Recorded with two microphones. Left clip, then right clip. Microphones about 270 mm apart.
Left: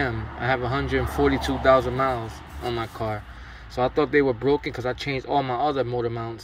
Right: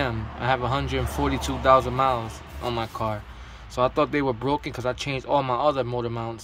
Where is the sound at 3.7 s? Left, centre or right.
Centre.